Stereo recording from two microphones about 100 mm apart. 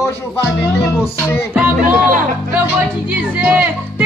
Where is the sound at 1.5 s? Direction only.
15° right (ahead or behind).